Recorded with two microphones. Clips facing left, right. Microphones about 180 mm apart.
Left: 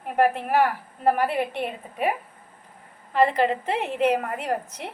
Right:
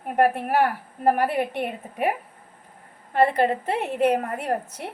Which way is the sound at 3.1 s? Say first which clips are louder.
Right 1 dB; 45° right (ahead or behind).